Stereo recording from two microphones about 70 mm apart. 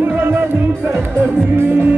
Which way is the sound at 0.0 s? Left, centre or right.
Right.